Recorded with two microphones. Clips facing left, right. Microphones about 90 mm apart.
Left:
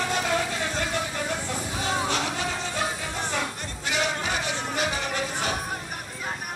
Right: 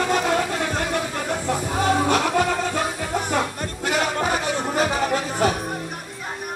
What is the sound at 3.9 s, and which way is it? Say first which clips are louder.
Music: right 5 dB; 45° right (ahead or behind).